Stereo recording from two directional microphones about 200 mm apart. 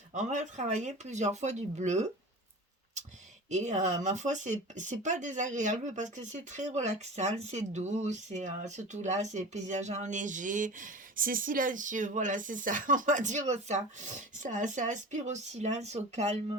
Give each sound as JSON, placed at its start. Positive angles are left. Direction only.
{"t": 0.1, "sound": "speech", "side_deg": -35}
{"t": 3.5, "sound": "speech", "side_deg": -35}